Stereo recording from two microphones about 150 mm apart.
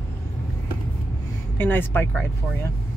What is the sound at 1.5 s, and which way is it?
Speech, 15° left (ahead or behind).